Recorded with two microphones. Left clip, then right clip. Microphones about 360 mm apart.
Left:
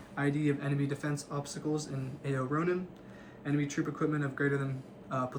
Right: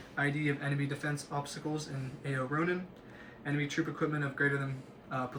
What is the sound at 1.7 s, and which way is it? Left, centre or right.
Speech, centre.